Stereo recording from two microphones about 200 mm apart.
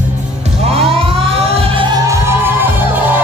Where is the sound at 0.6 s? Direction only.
30° right (ahead or behind).